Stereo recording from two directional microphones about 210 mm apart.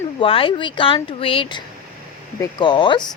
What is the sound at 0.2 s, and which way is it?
Speech, 25° left (ahead or behind).